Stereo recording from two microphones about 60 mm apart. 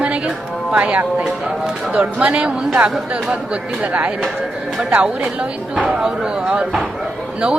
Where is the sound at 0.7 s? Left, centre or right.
Right.